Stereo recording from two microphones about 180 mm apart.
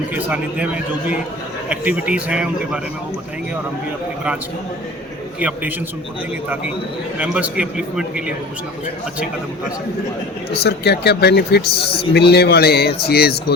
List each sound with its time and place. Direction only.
0.1 s a man's voice: 10° right (ahead or behind)
5.4 s a man's voice: 10° right (ahead or behind)
7.2 s a man's voice: 5° right (ahead or behind)
10.5 s speech: 65° left (ahead or behind)